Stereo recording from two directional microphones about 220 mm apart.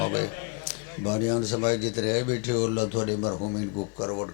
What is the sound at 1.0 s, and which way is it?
A man's voice, 25° left (ahead or behind).